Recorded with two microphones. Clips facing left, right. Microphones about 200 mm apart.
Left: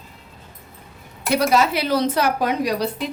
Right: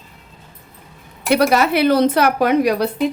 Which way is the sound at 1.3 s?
65° right (ahead or behind).